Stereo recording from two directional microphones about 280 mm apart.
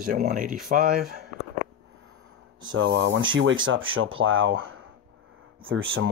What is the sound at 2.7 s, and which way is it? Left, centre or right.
Speech, right.